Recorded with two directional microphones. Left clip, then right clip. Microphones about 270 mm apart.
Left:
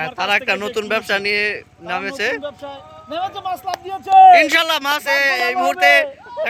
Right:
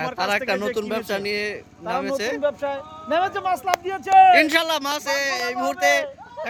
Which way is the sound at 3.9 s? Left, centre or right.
Centre.